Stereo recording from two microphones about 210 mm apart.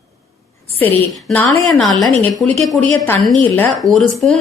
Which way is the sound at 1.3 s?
5° left (ahead or behind).